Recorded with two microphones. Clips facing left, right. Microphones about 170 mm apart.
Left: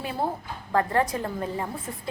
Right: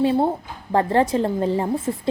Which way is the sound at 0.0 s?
25° right (ahead or behind).